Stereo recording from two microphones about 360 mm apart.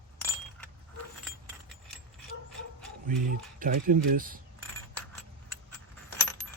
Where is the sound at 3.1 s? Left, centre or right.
Right.